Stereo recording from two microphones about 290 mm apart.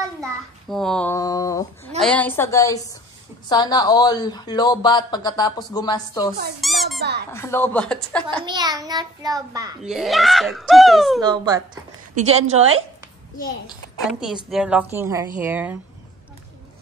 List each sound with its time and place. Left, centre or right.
0.7 s a woman's voice: centre
6.6 s a child's voice: centre
7.0 s speech: right
7.3 s a woman's voice: centre
8.5 s a child's voice: centre
9.8 s a woman's voice: centre
11.1 s a child's voice: centre
14.2 s a woman's voice: centre